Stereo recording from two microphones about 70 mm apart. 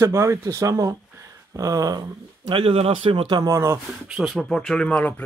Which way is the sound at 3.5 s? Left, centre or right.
Right.